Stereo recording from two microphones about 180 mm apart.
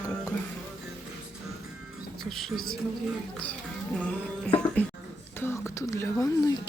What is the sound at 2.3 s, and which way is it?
Music, centre (ahead or behind).